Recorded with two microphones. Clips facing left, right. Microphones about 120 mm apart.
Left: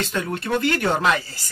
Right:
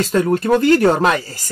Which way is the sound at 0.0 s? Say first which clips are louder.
Right 10 dB; 40° right (ahead or behind).